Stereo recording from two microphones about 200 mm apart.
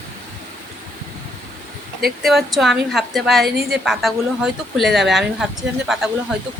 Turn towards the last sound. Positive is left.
turn(degrees=0)  # may be behind; listen again after turning